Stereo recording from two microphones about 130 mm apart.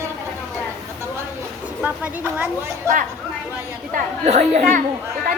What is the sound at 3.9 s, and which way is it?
Speech, 60° right (ahead or behind).